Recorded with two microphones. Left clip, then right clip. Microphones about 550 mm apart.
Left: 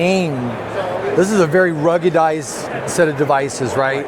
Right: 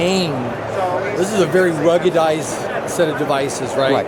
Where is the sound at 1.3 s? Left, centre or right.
Left.